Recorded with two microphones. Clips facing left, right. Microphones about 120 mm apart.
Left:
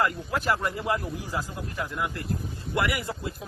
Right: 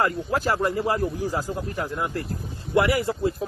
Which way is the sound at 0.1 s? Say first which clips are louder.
Right 3 dB; 30° right (ahead or behind).